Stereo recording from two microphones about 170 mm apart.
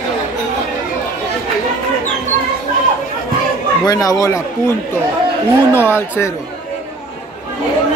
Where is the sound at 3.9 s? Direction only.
20° left (ahead or behind).